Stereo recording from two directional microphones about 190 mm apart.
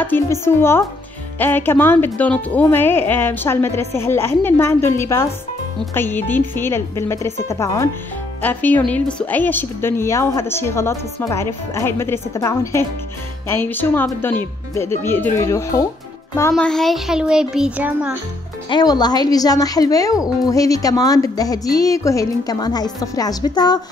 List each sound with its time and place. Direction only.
0.0 s a woman's voice: 10° left (ahead or behind)
16.5 s a child's voice: centre (ahead or behind)
18.7 s a woman's voice: 20° left (ahead or behind)